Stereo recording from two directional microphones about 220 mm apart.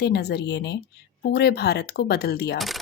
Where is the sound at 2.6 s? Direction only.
Centre (ahead or behind).